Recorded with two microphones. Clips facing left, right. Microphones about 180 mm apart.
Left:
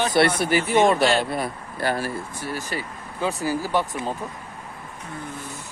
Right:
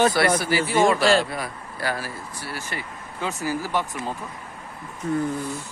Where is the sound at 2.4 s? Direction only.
15° left (ahead or behind).